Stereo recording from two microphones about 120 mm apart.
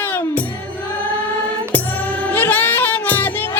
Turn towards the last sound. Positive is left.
turn(degrees=15)  # may be behind; listen again after turning